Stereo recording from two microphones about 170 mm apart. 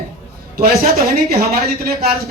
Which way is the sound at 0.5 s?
60° right (ahead or behind).